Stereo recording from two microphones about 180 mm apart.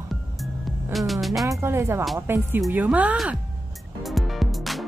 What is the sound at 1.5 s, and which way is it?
A woman's voice, 15° right (ahead or behind).